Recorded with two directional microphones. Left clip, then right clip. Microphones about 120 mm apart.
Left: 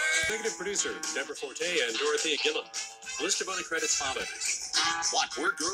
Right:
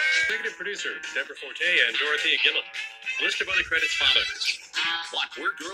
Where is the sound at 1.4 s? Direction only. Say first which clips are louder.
Right 9 dB; 55° left (ahead or behind).